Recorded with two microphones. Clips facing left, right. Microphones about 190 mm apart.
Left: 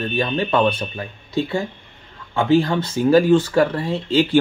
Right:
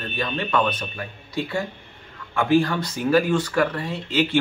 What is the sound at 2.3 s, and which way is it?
Speech, 25° left (ahead or behind).